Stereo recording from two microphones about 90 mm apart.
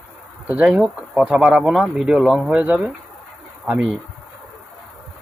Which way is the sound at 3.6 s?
15° right (ahead or behind).